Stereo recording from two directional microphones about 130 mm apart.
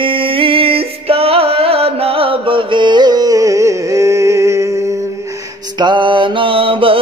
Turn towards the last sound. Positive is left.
turn(degrees=-45)  # may be behind; listen again after turning